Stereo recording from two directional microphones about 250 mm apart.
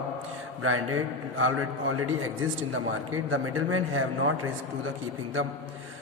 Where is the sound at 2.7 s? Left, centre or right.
Right.